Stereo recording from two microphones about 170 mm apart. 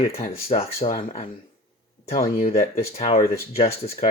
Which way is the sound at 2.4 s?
45° left (ahead or behind).